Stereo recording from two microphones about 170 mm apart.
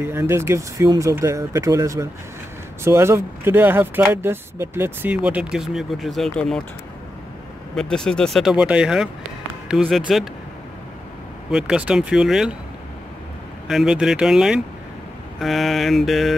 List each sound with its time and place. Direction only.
0.0 s speech: 15° right (ahead or behind); by 6.6 s 5° left (ahead or behind)
7.7 s speech: 5° left (ahead or behind)
11.5 s speech: 5° right (ahead or behind)
13.7 s speech: 5° right (ahead or behind)